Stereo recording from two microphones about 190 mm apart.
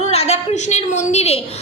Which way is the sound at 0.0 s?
35° left (ahead or behind).